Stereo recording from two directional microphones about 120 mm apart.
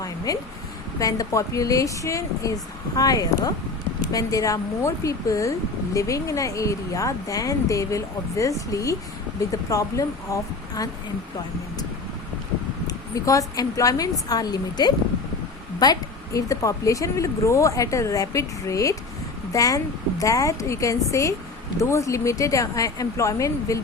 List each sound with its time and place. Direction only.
0.3 s a woman's voice: 30° left (ahead or behind)
12.9 s a woman's voice: 25° left (ahead or behind)